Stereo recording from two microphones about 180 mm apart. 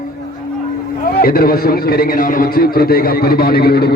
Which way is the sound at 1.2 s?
55° left (ahead or behind).